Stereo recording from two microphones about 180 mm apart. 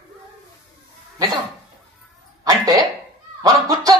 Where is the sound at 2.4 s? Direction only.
20° right (ahead or behind).